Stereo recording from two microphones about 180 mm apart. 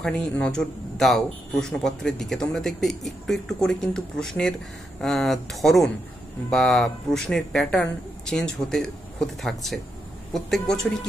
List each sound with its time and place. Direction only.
0.0 s speech: 5° left (ahead or behind)